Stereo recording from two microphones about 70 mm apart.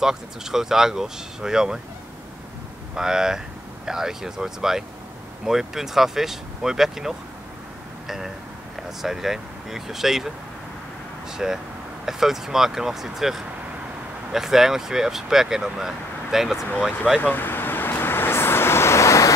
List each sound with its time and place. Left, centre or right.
0.0 s speech: centre
2.9 s speech: centre
9.0 s speech: centre
17.2 s vehicle: left